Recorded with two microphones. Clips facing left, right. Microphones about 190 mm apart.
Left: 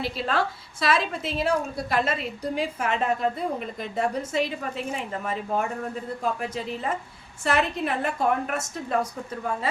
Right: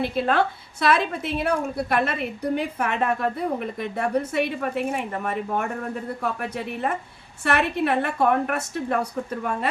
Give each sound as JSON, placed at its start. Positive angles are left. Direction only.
{"t": 0.0, "sound": "a woman's voice", "side_deg": -55}